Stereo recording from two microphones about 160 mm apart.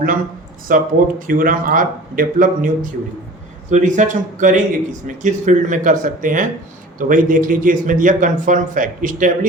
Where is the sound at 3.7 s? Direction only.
50° right (ahead or behind).